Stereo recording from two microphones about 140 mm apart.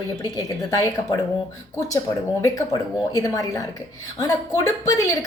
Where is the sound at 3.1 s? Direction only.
25° left (ahead or behind).